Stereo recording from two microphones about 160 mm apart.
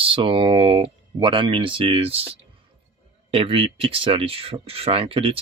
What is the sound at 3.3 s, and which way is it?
Speech, 35° right (ahead or behind).